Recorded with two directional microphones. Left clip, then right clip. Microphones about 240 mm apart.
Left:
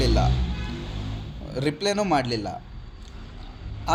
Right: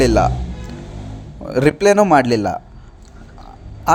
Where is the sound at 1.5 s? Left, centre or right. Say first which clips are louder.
Right 13 dB; right.